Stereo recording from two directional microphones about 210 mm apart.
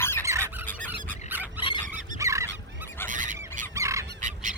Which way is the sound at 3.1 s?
40° right (ahead or behind).